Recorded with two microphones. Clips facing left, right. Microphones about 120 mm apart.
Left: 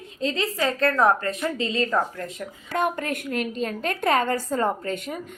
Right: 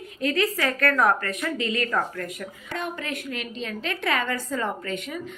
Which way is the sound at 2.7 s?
50° left (ahead or behind).